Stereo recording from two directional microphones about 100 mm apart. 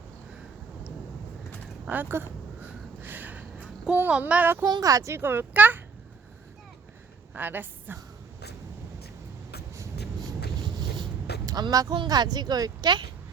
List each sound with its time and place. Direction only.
1.8 s speech: 20° right (ahead or behind)
3.0 s a sound: 20° right (ahead or behind)
3.9 s speech: 20° right (ahead or behind)
4.6 s speech: 40° right (ahead or behind); by 5.8 s 20° right (ahead or behind)
7.3 s a woman's voice: 20° right (ahead or behind)
10.2 s vehicle: 45° right (ahead or behind)
11.9 s speech: 45° right (ahead or behind)